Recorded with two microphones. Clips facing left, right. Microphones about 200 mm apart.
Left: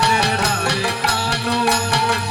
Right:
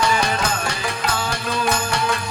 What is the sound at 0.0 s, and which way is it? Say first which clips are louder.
Music: left 1 dB; 70° left (ahead or behind).